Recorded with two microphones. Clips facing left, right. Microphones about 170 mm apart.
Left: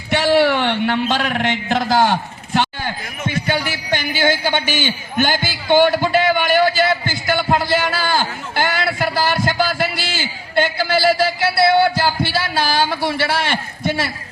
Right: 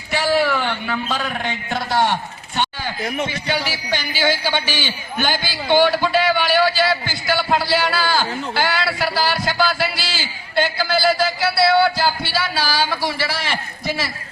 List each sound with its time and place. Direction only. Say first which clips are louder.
0.1 s a man's voice: left 4 dB; 70° left (ahead or behind); by 2.1 s 90° left
3.2 s a man's voice: left 3 dB; 50° left (ahead or behind)